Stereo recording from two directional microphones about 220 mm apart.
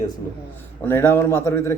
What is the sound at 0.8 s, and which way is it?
Speech, 10° left (ahead or behind).